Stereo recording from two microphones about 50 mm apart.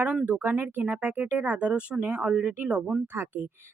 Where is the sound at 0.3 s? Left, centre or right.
Right.